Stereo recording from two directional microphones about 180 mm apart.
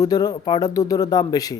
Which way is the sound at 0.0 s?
20° left (ahead or behind).